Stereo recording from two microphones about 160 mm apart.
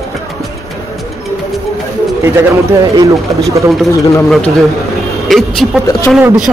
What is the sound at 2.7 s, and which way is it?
Speech, 25° right (ahead or behind).